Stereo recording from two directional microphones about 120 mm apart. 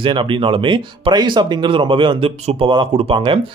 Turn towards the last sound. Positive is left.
turn(degrees=-40)  # may be behind; listen again after turning